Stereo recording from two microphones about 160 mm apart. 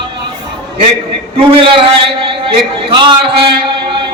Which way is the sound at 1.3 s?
35° right (ahead or behind).